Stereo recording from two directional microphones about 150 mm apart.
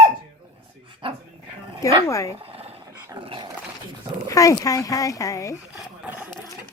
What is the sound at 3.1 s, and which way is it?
Dog, 35° right (ahead or behind).